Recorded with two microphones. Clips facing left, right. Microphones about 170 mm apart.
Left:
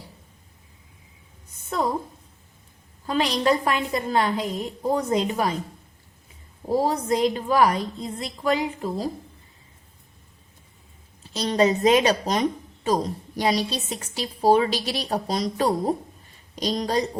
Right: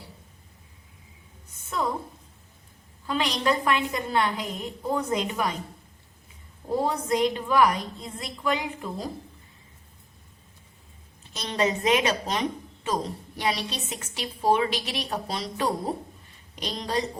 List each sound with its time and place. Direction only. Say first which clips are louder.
3.1 s a woman's voice: left 4 dB; 35° left (ahead or behind)
6.7 s a woman's voice: left 3 dB; 35° left (ahead or behind)
11.2 s a woman's voice: left 6 dB; 35° left (ahead or behind)